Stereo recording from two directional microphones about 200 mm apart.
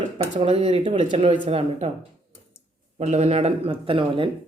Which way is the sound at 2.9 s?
35° right (ahead or behind).